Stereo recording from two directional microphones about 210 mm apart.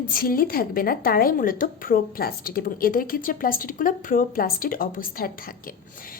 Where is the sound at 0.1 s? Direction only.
45° left (ahead or behind).